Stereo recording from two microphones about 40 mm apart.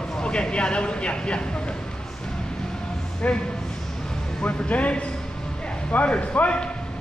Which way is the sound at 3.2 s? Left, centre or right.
Left.